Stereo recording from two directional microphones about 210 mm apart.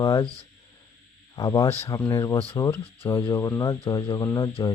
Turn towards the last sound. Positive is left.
turn(degrees=20)  # may be behind; listen again after turning